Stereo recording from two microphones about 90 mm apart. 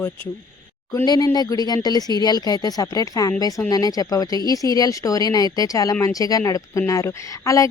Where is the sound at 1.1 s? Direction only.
45° left (ahead or behind).